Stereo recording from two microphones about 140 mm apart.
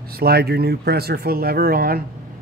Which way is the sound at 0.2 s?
90° right.